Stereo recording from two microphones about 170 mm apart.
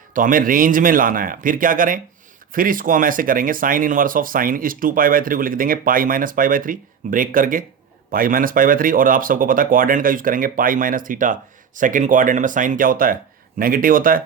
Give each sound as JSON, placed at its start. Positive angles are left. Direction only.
{"t": 0.1, "sound": "speech", "side_deg": -55}